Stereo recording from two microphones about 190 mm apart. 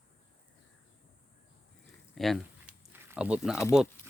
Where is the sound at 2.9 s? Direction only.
10° right (ahead or behind).